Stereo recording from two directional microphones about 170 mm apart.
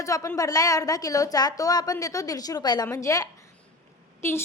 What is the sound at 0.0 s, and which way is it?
A woman's voice, 20° left (ahead or behind).